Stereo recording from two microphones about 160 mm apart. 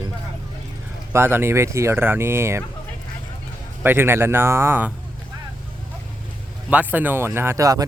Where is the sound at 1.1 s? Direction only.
15° right (ahead or behind).